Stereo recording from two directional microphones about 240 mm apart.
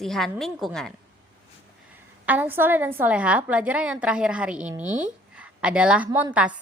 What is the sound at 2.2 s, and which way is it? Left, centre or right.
A woman's voice, centre.